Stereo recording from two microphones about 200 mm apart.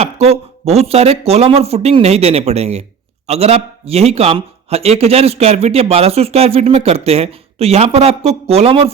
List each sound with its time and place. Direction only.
0.0 s speech: 30° right (ahead or behind)